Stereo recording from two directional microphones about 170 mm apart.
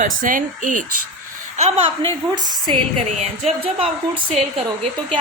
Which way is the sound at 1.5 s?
35° right (ahead or behind).